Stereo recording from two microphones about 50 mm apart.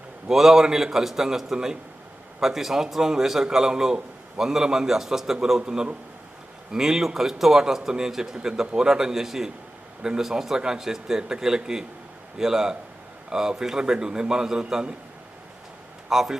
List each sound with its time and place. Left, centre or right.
0.3 s a man's voice: centre
16.0 s a man's voice: centre